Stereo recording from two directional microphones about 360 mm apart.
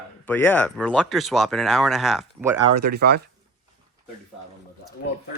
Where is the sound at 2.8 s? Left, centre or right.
Right.